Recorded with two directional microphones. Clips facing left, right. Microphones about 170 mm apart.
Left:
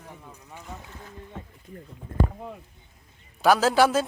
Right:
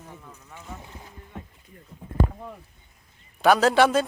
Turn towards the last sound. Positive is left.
turn(degrees=0)  # may be behind; listen again after turning